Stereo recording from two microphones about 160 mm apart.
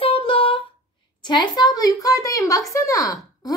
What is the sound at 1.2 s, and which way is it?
A woman's voice, 25° left (ahead or behind).